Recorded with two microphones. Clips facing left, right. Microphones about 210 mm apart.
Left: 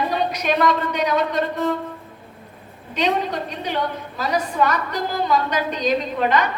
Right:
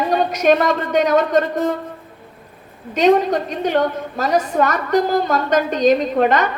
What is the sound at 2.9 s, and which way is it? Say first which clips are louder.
A woman's voice: right 8 dB; 45° right (ahead or behind).